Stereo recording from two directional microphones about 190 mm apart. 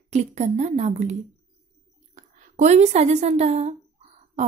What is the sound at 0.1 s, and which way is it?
Speech, 35° right (ahead or behind).